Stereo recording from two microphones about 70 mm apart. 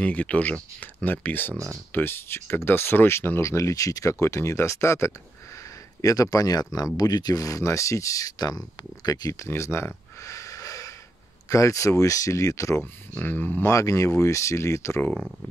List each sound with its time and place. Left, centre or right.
0.0 s speech: left
9.3 s a sound: left
11.4 s speech: left
13.2 s speech: left
13.7 s speech: left